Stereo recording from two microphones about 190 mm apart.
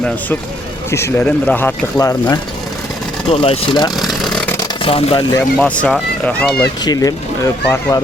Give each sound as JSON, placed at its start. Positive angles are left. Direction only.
{"t": 0.9, "sound": "speech", "side_deg": 15}
{"t": 3.2, "sound": "speech", "side_deg": 30}
{"t": 3.9, "sound": "vehicle", "side_deg": 0}
{"t": 4.8, "sound": "speech", "side_deg": 30}
{"t": 5.4, "sound": "speech", "side_deg": 5}
{"t": 6.8, "sound": "speech", "side_deg": 20}